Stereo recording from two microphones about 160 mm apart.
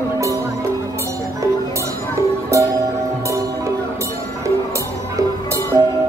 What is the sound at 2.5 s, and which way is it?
Music, 20° right (ahead or behind).